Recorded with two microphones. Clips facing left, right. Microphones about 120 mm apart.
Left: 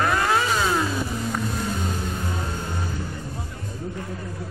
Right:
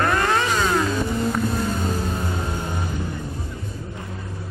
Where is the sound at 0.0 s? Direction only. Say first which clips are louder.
Right 1 dB; 5° left (ahead or behind).